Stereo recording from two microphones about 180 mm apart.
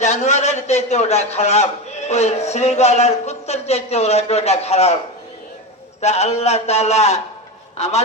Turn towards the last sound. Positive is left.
turn(degrees=35)  # may be behind; listen again after turning